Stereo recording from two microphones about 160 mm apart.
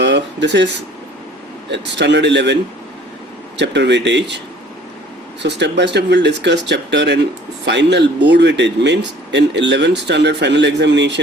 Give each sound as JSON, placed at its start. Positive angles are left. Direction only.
{"t": 0.0, "sound": "a sound", "side_deg": -90}
{"t": 1.7, "sound": "speech", "side_deg": -90}
{"t": 3.6, "sound": "speech", "side_deg": -90}
{"t": 5.4, "sound": "speech", "side_deg": -90}